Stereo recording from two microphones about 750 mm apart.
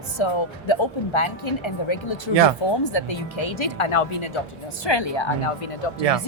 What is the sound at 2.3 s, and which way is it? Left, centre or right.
Speech, right.